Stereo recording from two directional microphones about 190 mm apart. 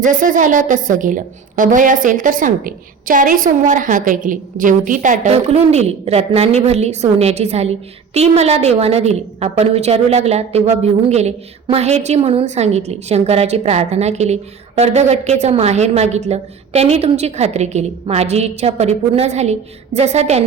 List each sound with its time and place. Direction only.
0.0 s a woman's voice: 45° right (ahead or behind)